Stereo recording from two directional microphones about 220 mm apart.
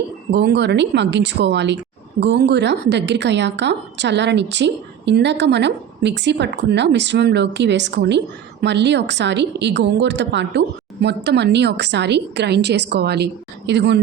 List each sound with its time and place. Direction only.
0.3 s a woman's voice: 50° right (ahead or behind)